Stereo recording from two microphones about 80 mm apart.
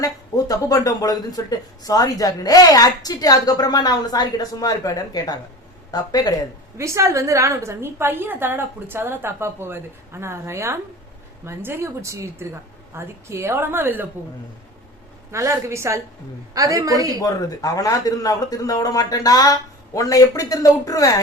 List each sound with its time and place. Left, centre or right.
0.0 s speech: left
6.7 s a woman's voice: right
15.3 s a woman's voice: right
17.2 s speech: left